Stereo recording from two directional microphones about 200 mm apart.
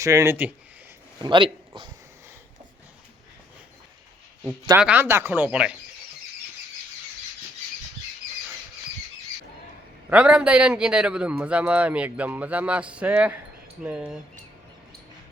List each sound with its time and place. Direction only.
0.0 s speech: 15° right (ahead or behind)
1.2 s speech: 25° right (ahead or behind)
4.7 s speech: 10° right (ahead or behind)
10.1 s a man's voice: 5° right (ahead or behind)